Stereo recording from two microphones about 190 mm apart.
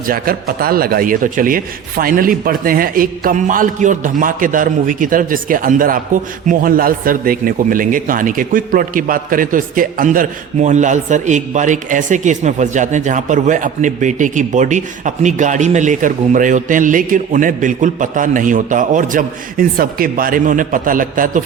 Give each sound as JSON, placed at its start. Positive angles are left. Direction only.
{"t": 0.1, "sound": "a man's voice", "side_deg": -50}